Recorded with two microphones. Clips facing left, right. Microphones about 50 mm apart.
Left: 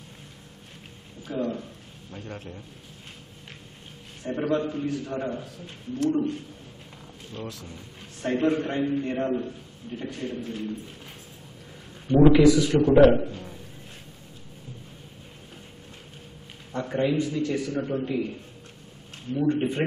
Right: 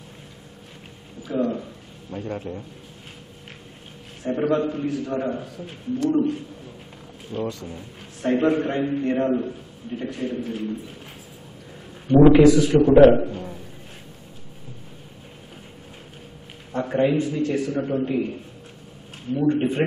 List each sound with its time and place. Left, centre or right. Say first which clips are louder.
1.3 s a sound: right 5 dB; centre
2.0 s a man's voice: right 9 dB; centre
4.2 s a man's voice: right 4 dB; centre
7.3 s a man's voice: right 9 dB; right
7.6 s a man's voice: right 6 dB; centre
12.1 s a sound: right 4 dB; right
12.4 s a man's voice: right 4 dB; centre
13.1 s a sound: right 4 dB; centre
16.7 s a man's voice: right 4 dB; centre
18.0 s a man's voice: right 4 dB; right
19.3 s a man's voice: right 3 dB; centre